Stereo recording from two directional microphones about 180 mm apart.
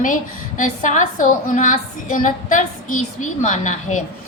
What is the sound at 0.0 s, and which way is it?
A woman's voice, 45° left (ahead or behind).